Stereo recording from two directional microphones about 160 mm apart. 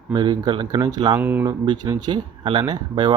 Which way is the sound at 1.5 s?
25° right (ahead or behind).